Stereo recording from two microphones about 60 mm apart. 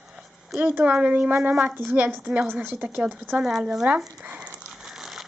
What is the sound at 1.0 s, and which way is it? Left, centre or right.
A woman's voice, right.